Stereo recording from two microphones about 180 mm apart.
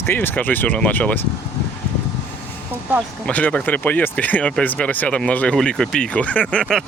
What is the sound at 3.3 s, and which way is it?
Speech, 5° left (ahead or behind).